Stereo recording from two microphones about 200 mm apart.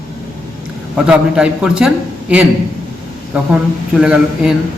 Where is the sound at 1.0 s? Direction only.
5° right (ahead or behind).